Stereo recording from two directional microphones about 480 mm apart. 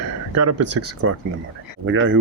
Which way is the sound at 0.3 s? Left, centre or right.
Right.